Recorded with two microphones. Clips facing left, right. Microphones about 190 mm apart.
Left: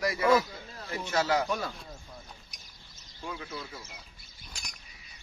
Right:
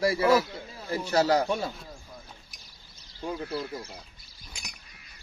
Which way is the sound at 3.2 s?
35° right (ahead or behind).